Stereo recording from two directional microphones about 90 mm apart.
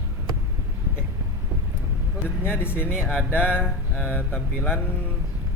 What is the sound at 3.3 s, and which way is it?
A man's voice, 20° left (ahead or behind).